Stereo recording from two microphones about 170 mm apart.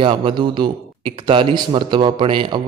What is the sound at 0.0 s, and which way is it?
A man's voice, 30° right (ahead or behind).